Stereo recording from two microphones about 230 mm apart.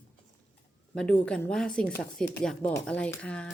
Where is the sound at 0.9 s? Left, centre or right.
Centre.